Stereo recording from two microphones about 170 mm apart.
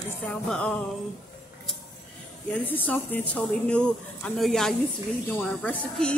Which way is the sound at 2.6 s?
10° left (ahead or behind).